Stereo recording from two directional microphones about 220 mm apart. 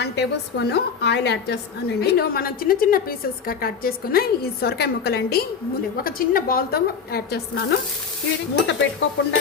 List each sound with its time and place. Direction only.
0.0 s a woman's voice: 45° left (ahead or behind)